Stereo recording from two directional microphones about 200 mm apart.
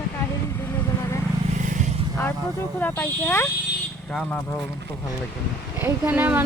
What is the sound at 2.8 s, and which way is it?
Speech, 10° left (ahead or behind).